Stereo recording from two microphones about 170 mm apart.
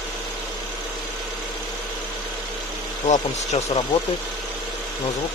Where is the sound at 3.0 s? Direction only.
35° left (ahead or behind).